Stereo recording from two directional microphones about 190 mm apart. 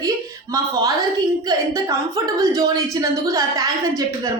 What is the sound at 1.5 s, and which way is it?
A woman's voice, 15° right (ahead or behind).